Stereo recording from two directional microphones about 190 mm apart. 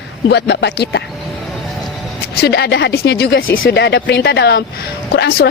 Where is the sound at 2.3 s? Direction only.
60° left (ahead or behind).